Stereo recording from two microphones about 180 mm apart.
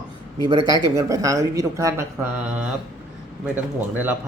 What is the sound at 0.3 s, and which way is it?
Speech, 20° right (ahead or behind).